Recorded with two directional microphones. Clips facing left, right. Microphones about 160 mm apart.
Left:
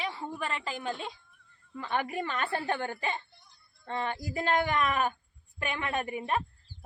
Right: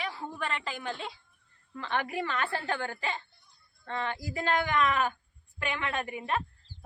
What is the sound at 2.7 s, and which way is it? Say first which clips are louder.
Speech: left 1 dB; 20° left (ahead or behind).